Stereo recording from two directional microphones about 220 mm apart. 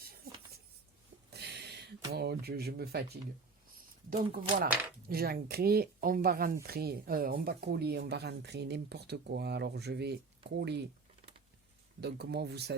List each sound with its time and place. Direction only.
1.3 s a sound: 50° right (ahead or behind)
4.1 s speech: 40° right (ahead or behind)
11.9 s speech: 50° right (ahead or behind)